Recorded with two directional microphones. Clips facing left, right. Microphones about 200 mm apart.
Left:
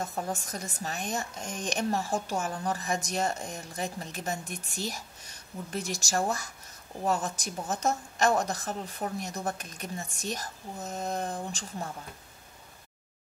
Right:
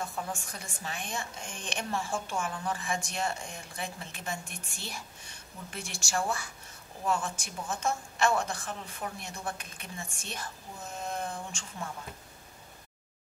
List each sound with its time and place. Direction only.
0.0 s speech: 40° left (ahead or behind)